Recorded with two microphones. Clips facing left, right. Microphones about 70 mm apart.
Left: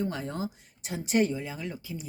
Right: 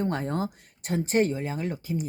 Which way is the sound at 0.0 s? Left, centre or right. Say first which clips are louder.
Right 4 dB; right.